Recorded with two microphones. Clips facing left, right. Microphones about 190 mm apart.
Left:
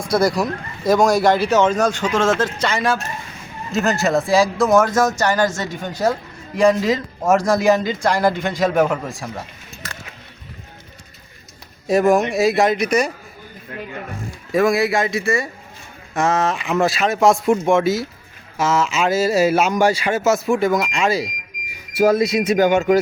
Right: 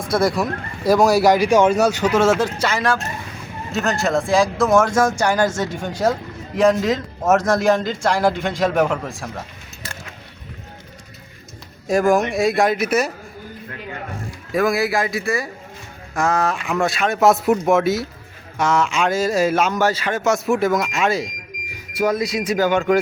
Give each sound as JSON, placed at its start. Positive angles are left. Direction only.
{"t": 0.0, "sound": "a man's voice", "side_deg": 0}
{"t": 11.9, "sound": "a man's voice", "side_deg": 0}
{"t": 14.5, "sound": "a man's voice", "side_deg": 0}
{"t": 21.9, "sound": "speech", "side_deg": 30}